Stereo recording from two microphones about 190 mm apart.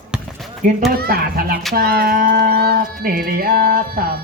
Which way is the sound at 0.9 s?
50° right (ahead or behind).